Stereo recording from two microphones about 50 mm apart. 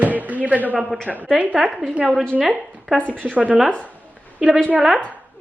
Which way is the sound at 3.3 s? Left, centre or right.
Right.